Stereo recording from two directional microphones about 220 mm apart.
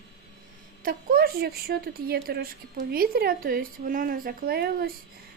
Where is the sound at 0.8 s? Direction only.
40° right (ahead or behind).